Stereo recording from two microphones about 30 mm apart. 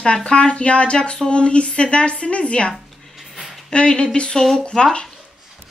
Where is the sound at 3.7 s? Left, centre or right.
Left.